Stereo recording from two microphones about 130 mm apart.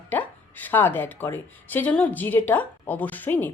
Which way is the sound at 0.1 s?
15° left (ahead or behind).